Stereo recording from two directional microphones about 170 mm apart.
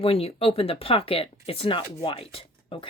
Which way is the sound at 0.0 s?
35° left (ahead or behind).